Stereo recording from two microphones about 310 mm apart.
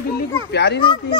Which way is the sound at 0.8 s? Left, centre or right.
Centre.